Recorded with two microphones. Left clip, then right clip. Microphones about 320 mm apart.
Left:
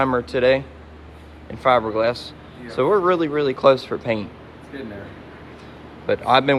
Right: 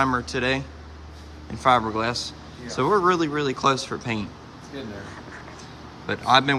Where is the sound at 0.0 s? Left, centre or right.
Centre.